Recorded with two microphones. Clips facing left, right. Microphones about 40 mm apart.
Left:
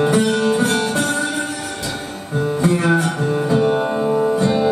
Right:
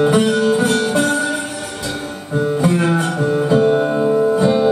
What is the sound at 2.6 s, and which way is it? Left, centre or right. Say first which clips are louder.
Music: right 1 dB; centre.